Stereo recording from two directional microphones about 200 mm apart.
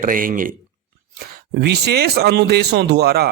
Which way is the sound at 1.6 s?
55° right (ahead or behind).